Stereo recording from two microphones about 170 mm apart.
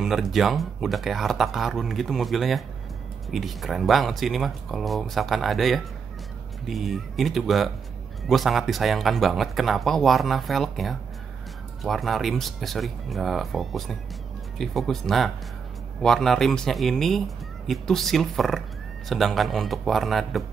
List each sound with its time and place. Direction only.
0.0 s speech: centre (ahead or behind)